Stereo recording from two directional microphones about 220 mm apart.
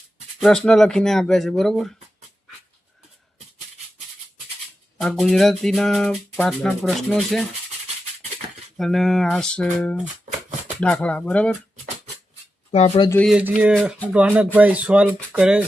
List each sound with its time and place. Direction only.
0.3 s music: centre (ahead or behind)
4.9 s music: centre (ahead or behind)
8.8 s music: centre (ahead or behind)
12.7 s speech: 30° left (ahead or behind)
13.1 s speech: 5° left (ahead or behind)
13.3 s music: 5° right (ahead or behind)